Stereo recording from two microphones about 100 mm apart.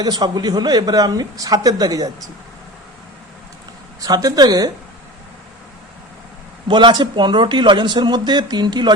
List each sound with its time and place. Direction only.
0.0 s speech: 40° right (ahead or behind)
4.0 s speech: 40° right (ahead or behind)
6.7 s a man's voice: 50° right (ahead or behind)